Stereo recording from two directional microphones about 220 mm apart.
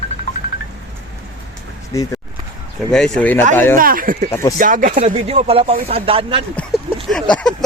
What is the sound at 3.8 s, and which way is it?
Speech, 40° right (ahead or behind).